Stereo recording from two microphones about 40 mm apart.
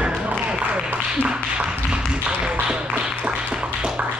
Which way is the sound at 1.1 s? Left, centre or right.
Right.